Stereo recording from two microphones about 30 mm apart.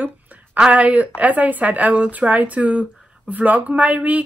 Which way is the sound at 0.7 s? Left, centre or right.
Right.